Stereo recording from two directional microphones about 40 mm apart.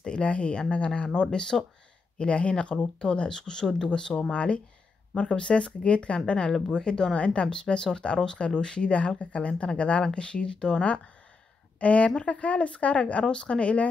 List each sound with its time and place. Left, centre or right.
0.0 s speech: left
4.3 s a woman's voice: left
5.3 s a woman's voice: left